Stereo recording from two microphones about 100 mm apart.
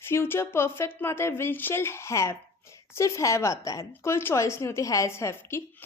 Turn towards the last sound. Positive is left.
turn(degrees=25)  # may be behind; listen again after turning